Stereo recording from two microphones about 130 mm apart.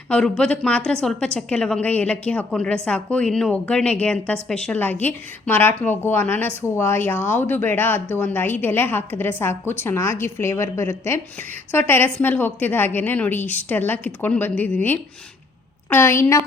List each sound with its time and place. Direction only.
0.1 s a woman's voice: 5° left (ahead or behind)